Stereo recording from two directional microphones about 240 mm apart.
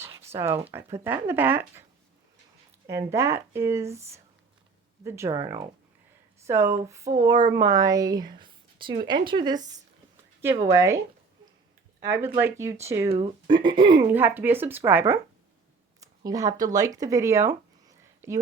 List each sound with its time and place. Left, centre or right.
0.0 s a sound: centre
0.9 s speech: centre
2.8 s speech: centre
5.0 s speech: centre
10.7 s speech: centre
12.0 s speech: centre
13.1 s speech: right
14.1 s speech: centre